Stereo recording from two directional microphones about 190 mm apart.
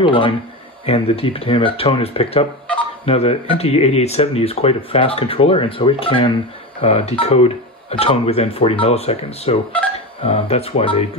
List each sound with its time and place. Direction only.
0.0 s speech: 25° left (ahead or behind)